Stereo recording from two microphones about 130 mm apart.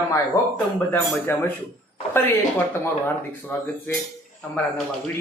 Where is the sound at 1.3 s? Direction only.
20° left (ahead or behind).